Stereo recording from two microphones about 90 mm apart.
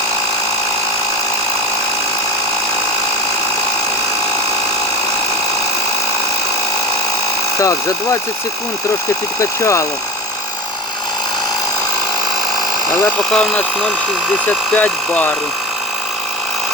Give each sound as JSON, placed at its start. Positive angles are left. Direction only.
{"t": 7.6, "sound": "speech", "side_deg": 35}
{"t": 9.4, "sound": "speech", "side_deg": 35}
{"t": 13.3, "sound": "speech", "side_deg": 5}
{"t": 14.7, "sound": "speech", "side_deg": 15}